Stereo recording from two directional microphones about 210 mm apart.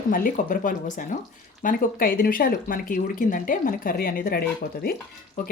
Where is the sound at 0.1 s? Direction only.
40° left (ahead or behind).